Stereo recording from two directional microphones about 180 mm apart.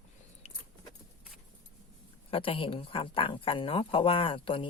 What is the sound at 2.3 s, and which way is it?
Speech, 30° left (ahead or behind).